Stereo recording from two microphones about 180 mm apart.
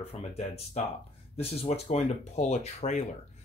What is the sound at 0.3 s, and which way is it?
Speech, 35° left (ahead or behind).